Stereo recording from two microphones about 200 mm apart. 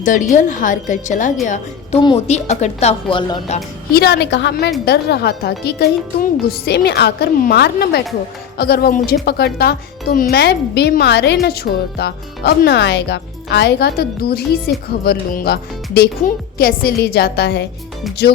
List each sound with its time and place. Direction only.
0.0 s a woman's voice: 40° left (ahead or behind)
1.5 s a woman's voice: 25° left (ahead or behind)
3.9 s speech: 55° left (ahead or behind)